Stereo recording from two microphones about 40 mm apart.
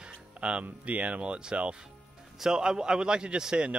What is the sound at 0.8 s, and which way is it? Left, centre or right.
A man's voice, right.